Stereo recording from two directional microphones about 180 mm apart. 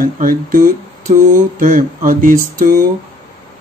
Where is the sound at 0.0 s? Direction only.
50° right (ahead or behind).